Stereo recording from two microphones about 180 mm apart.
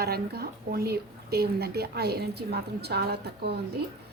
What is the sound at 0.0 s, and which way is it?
Speech, 60° right (ahead or behind).